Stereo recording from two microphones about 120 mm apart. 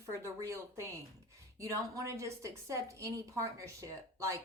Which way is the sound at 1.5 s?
25° right (ahead or behind).